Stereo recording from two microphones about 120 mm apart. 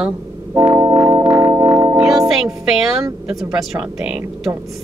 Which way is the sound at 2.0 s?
Centre (ahead or behind).